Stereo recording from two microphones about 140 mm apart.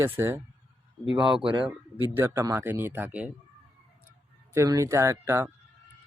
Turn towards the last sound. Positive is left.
turn(degrees=-15)  # may be behind; listen again after turning